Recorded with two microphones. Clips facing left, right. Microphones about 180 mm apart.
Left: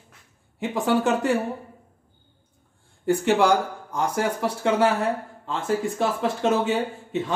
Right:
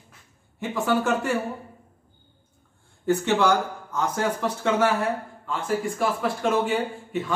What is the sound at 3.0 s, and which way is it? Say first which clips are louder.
Speech: left 2 dB; 15° left (ahead or behind).